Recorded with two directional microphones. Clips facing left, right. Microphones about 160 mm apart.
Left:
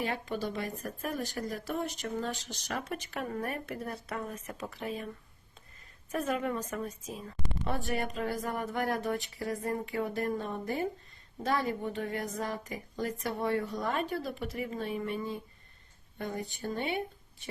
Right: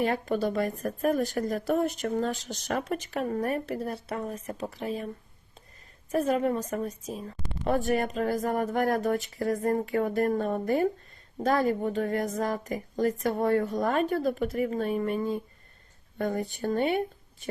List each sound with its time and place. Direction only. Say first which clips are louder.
0.0 s speech: right 7 dB; 45° right (ahead or behind)
6.1 s a woman's voice: right 6 dB; 35° right (ahead or behind)